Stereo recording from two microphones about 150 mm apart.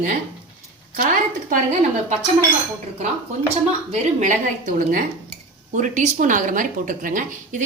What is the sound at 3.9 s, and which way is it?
A woman's voice, 55° right (ahead or behind).